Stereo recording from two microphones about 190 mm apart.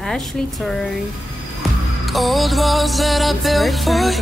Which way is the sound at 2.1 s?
Centre (ahead or behind).